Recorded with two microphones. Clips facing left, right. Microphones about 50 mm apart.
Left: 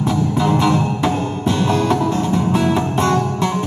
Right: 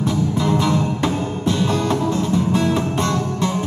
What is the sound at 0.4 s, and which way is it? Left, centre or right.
Music, left.